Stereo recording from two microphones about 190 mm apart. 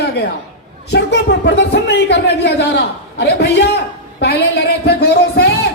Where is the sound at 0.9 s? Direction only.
65° left (ahead or behind).